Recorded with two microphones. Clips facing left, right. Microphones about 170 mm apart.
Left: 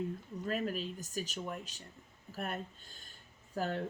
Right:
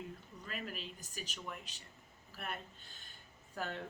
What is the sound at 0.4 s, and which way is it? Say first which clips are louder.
Speech: left 9 dB; 40° left (ahead or behind).